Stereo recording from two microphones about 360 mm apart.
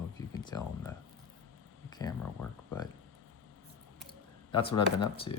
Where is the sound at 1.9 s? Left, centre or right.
Centre.